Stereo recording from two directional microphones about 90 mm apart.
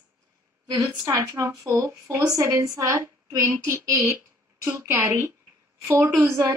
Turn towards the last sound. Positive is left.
turn(degrees=-35)  # may be behind; listen again after turning